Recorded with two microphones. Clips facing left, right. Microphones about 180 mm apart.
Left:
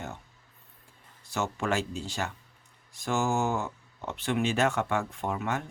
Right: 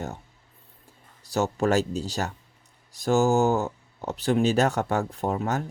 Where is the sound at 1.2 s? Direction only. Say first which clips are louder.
Right 7 dB; 40° right (ahead or behind).